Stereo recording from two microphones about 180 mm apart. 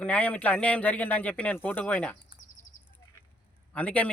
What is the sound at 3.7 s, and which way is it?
Speech, 10° left (ahead or behind).